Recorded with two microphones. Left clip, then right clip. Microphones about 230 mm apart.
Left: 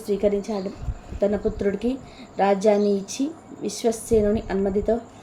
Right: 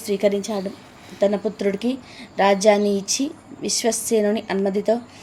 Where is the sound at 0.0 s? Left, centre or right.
Centre.